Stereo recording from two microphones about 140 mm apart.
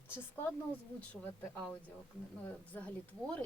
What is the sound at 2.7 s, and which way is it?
Speech, 10° left (ahead or behind).